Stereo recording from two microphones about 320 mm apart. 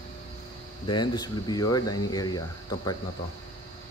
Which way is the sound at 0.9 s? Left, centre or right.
Centre.